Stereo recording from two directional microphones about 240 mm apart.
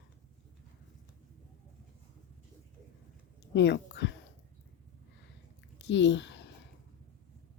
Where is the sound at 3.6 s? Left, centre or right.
Left.